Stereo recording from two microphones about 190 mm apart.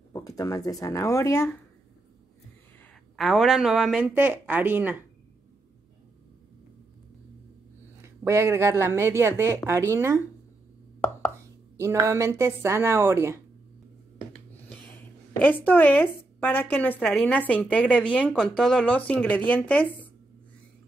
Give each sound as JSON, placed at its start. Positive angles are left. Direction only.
{"t": 0.1, "sound": "speech", "side_deg": 20}
{"t": 3.2, "sound": "speech", "side_deg": 0}
{"t": 8.0, "sound": "a woman's voice", "side_deg": -15}
{"t": 11.7, "sound": "a woman's voice", "side_deg": -15}
{"t": 15.4, "sound": "a woman's voice", "side_deg": 10}